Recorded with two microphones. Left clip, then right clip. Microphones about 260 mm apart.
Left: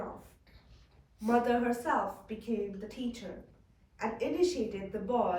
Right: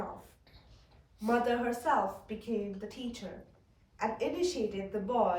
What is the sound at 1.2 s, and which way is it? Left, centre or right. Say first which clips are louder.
Speech: left 1 dB; centre.